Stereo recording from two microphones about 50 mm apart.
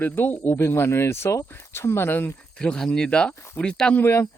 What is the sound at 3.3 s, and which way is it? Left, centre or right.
Speech, left.